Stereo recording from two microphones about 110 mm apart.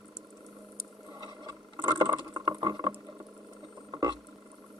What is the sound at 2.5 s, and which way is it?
Rowboat, 35° right (ahead or behind).